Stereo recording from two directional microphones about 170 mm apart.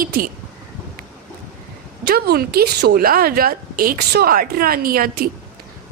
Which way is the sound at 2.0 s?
70° right (ahead or behind).